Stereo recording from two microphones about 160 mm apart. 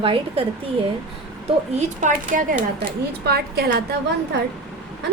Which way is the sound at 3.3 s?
75° right (ahead or behind).